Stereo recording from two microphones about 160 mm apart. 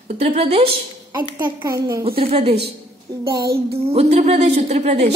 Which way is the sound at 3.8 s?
40° right (ahead or behind).